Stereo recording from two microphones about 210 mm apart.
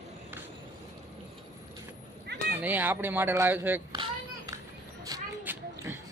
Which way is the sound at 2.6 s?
10° right (ahead or behind).